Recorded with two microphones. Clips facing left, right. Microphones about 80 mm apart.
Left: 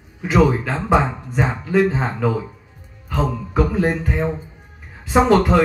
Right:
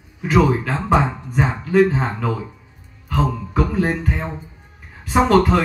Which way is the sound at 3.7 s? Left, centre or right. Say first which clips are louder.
Left 1 dB; centre.